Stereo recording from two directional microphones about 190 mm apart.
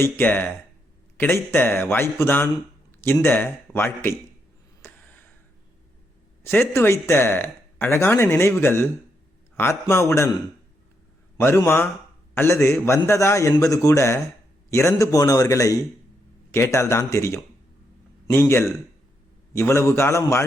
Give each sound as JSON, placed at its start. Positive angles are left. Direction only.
{"t": 0.0, "sound": "speech", "side_deg": 10}
{"t": 4.8, "sound": "a sound", "side_deg": 10}
{"t": 6.4, "sound": "speech", "side_deg": 10}
{"t": 11.3, "sound": "speech", "side_deg": 10}